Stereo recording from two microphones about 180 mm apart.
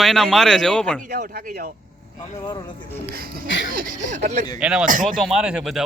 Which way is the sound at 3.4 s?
90° left.